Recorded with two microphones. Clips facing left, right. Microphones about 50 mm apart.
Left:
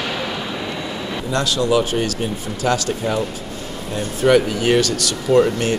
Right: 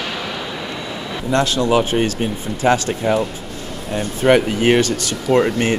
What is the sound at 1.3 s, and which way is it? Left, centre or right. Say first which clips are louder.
Speech: right 2 dB; right.